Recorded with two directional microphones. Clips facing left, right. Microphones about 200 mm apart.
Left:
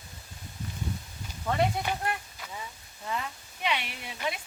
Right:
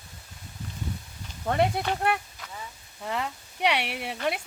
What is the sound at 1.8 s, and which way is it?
Speech, 65° right (ahead or behind).